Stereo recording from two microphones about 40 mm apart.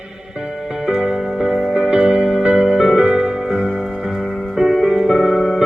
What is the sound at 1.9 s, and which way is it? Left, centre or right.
Music, right.